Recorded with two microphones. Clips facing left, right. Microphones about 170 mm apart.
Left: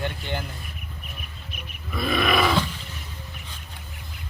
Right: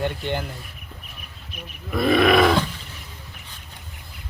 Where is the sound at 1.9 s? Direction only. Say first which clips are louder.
Right 6 dB; 55° right (ahead or behind).